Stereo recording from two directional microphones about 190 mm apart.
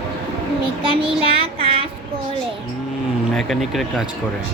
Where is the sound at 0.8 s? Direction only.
25° right (ahead or behind).